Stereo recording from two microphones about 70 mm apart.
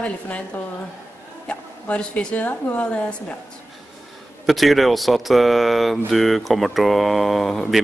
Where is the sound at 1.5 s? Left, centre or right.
Centre.